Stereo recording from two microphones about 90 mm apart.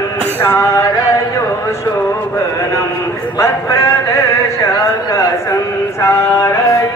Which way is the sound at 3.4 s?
35° left (ahead or behind).